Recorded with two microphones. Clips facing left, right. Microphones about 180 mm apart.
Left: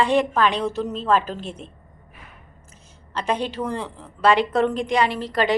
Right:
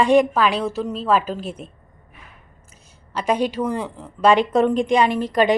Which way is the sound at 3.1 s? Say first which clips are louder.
Right 4 dB; 10° right (ahead or behind).